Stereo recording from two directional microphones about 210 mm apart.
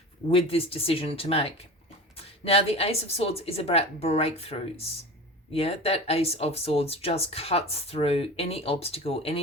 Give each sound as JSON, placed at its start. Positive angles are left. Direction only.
{"t": 0.3, "sound": "speech", "side_deg": 25}